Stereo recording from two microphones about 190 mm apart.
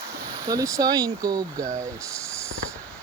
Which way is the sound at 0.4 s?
15° right (ahead or behind).